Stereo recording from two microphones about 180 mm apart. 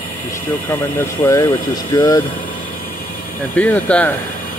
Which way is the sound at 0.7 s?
15° left (ahead or behind).